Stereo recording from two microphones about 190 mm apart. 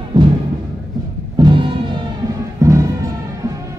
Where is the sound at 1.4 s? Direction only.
25° right (ahead or behind).